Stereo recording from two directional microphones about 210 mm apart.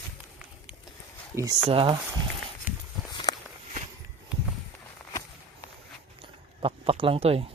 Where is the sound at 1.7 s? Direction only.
25° right (ahead or behind).